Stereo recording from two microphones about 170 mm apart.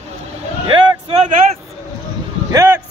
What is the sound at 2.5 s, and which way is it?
Speech, 15° right (ahead or behind).